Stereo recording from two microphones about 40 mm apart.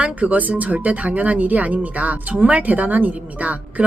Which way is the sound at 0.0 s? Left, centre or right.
Right.